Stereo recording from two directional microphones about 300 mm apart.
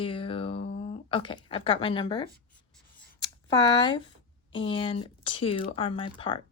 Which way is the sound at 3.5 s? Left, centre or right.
Centre.